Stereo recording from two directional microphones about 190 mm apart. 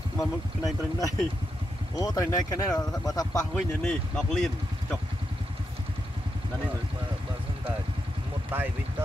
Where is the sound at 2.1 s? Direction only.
20° left (ahead or behind).